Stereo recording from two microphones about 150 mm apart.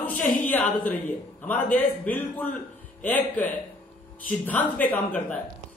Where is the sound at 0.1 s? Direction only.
60° left (ahead or behind).